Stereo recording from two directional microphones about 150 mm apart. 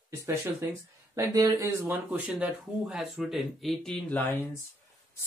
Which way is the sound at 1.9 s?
10° right (ahead or behind).